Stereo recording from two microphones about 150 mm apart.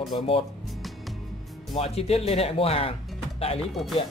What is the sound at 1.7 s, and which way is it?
Speech, 45° left (ahead or behind).